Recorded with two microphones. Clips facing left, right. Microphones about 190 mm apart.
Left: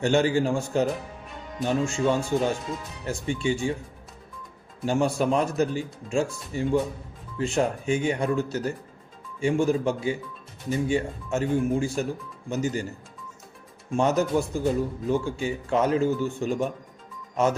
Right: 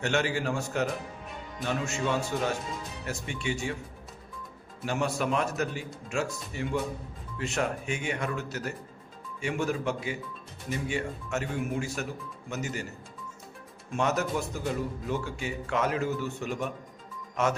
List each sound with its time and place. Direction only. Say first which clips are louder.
0.0 s speech: left 7 dB; 30° left (ahead or behind)
4.9 s speech: left 6 dB; 30° left (ahead or behind)
13.9 s speech: left 6 dB; 30° left (ahead or behind)